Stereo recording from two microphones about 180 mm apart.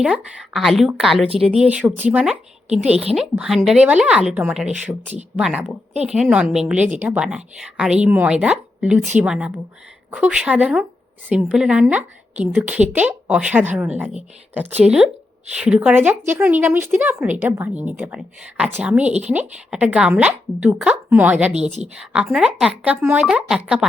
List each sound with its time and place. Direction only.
0.0 s a woman's voice: 5° right (ahead or behind)
2.9 s a woman's voice: 35° right (ahead or behind)
3.2 s a woman's voice: centre (ahead or behind)